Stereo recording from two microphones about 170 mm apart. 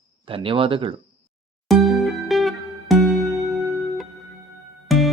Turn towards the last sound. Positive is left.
turn(degrees=0)  # may be behind; listen again after turning